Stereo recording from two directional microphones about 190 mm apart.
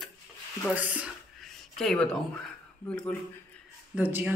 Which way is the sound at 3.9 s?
10° right (ahead or behind).